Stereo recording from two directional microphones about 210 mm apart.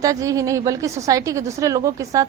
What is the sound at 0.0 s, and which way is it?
A woman's voice, 15° right (ahead or behind).